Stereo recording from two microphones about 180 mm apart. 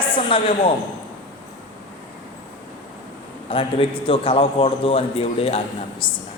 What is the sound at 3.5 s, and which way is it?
A man's voice, 30° left (ahead or behind).